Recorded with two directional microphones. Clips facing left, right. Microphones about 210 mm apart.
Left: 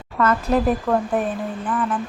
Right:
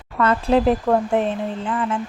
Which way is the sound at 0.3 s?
30° right (ahead or behind).